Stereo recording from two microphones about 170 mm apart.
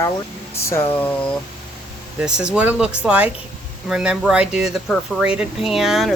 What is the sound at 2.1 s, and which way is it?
Speech, 5° right (ahead or behind).